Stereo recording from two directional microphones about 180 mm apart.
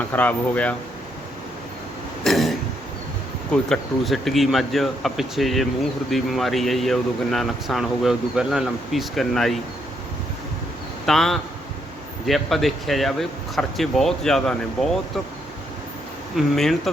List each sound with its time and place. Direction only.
0.1 s speech: 10° left (ahead or behind)
2.2 s throat clearing: centre (ahead or behind)
3.5 s speech: centre (ahead or behind)
11.0 s speech: centre (ahead or behind)
16.3 s speech: centre (ahead or behind)